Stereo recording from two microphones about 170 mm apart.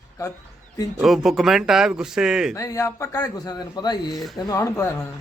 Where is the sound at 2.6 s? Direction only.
20° left (ahead or behind).